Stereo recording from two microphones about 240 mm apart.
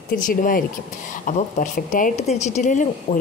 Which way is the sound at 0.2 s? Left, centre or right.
Left.